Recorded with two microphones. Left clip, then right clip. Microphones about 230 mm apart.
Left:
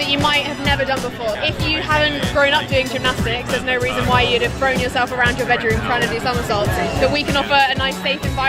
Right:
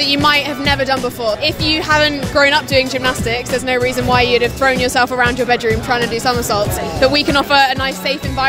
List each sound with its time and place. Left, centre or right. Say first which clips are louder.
0.3 s music: right 4 dB; right
1.4 s speech: right 4 dB; right